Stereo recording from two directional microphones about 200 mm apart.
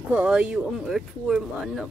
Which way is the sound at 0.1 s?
5° right (ahead or behind).